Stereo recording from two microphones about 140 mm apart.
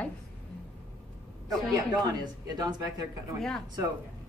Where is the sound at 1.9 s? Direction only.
30° right (ahead or behind).